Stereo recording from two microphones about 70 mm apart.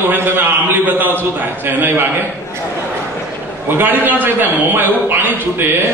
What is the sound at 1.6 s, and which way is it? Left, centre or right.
Speech, right.